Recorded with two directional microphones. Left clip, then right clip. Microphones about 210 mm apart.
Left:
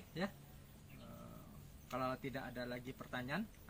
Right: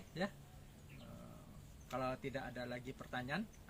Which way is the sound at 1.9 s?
15° right (ahead or behind).